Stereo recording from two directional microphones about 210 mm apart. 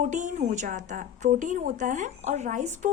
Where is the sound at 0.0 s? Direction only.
35° right (ahead or behind).